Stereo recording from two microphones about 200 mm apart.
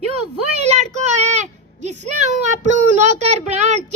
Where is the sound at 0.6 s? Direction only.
35° right (ahead or behind).